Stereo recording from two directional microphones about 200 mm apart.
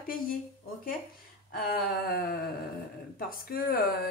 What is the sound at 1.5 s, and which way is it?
Speech, 50° left (ahead or behind).